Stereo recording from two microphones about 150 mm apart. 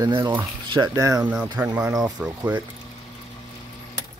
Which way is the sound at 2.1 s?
10° right (ahead or behind).